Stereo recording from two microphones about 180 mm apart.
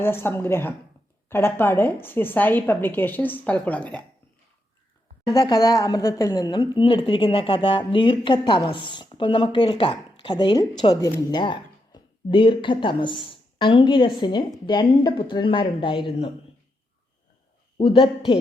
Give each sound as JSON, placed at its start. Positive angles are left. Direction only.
{"t": 0.0, "sound": "a woman's voice", "side_deg": 15}
{"t": 5.3, "sound": "a woman's voice", "side_deg": 20}
{"t": 17.7, "sound": "a woman's voice", "side_deg": 30}